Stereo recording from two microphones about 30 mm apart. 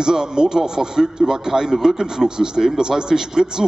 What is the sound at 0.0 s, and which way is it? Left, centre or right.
A man's voice, right.